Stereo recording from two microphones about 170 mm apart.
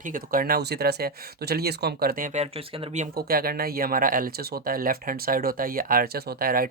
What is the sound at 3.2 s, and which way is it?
Speech, 60° right (ahead or behind).